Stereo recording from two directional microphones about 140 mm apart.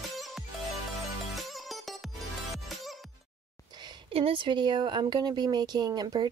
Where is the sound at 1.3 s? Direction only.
Centre (ahead or behind).